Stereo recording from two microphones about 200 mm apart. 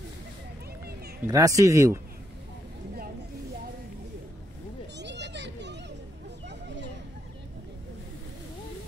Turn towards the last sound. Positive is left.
turn(degrees=-60)  # may be behind; listen again after turning